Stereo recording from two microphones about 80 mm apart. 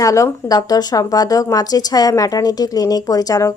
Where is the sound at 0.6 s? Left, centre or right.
Left.